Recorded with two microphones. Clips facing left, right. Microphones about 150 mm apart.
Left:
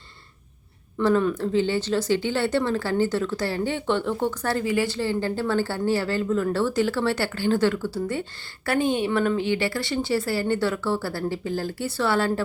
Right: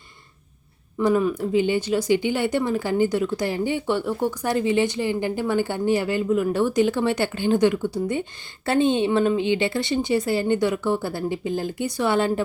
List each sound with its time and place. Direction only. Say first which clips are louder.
0.9 s speech: right 1 dB; 10° right (ahead or behind)